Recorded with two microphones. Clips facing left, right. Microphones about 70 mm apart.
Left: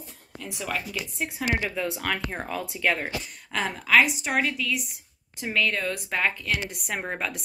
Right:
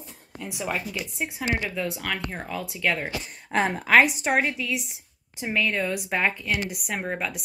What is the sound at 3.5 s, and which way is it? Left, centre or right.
A woman's voice, right.